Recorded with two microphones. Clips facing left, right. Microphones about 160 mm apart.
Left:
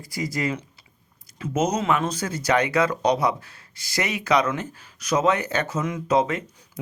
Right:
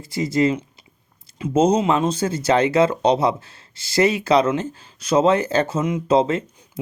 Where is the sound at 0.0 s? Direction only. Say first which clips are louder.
Right 8 dB; 25° right (ahead or behind).